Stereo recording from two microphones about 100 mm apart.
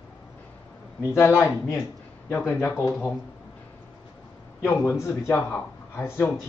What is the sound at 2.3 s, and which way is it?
Speech, 25° left (ahead or behind).